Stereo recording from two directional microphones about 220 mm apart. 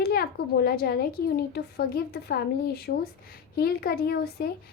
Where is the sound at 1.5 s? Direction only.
45° left (ahead or behind).